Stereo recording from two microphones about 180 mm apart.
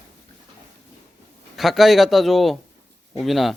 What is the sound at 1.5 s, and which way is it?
Speech, centre (ahead or behind).